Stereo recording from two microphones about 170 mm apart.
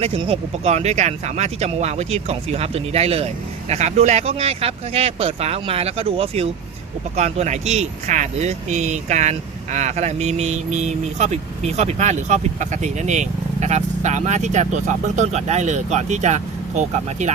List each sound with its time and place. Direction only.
0.0 s speech: 35° right (ahead or behind)